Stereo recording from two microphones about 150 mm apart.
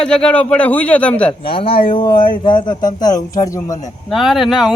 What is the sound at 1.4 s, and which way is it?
A man's voice, 35° left (ahead or behind).